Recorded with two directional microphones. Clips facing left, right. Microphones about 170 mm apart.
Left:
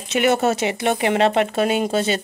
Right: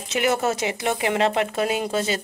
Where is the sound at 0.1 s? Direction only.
25° left (ahead or behind).